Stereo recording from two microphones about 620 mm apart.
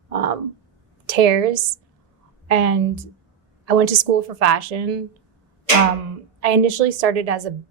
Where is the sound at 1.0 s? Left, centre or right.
Right.